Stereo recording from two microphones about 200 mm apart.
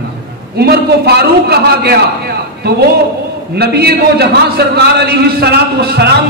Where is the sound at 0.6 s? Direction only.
55° right (ahead or behind).